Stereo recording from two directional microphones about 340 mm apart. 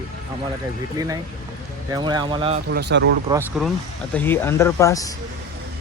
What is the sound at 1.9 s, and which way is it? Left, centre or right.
Speech, centre.